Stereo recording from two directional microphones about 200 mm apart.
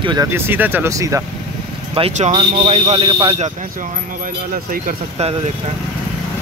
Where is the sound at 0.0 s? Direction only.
20° right (ahead or behind).